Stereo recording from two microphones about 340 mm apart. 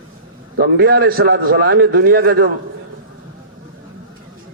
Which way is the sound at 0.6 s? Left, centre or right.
Right.